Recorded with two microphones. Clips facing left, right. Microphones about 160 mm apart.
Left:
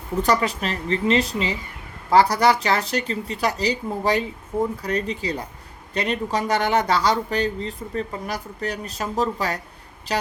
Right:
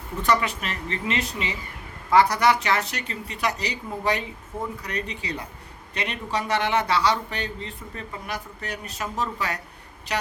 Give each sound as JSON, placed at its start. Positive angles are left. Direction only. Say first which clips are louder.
{"t": 0.2, "sound": "speech", "louder": "left 2 dB", "side_deg": 35}